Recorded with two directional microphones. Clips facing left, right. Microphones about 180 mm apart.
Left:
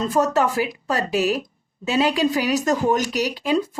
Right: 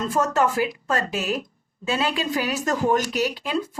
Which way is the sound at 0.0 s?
15° left (ahead or behind).